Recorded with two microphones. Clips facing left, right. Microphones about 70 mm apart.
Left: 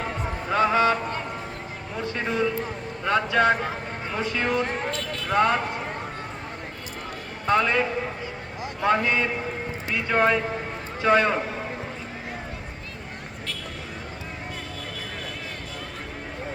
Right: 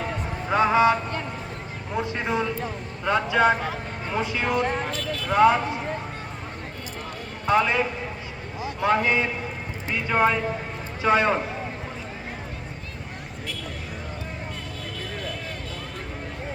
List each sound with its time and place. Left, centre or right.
0.5 s a sound: centre
2.0 s speech: centre
7.4 s speech: centre